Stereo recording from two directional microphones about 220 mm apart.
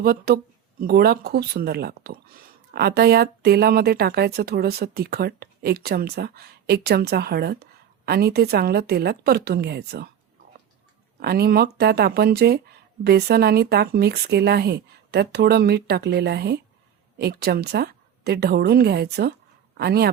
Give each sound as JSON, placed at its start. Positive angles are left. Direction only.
{"t": 0.0, "sound": "speech", "side_deg": -45}
{"t": 11.2, "sound": "a man's voice", "side_deg": -45}